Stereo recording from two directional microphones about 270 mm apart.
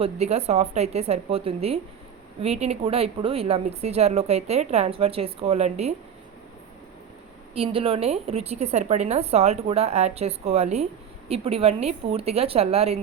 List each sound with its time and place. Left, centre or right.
0.0 s speech: right
7.5 s speech: right